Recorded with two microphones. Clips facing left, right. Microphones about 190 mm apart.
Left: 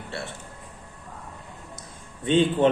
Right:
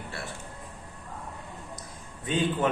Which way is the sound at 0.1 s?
25° left (ahead or behind).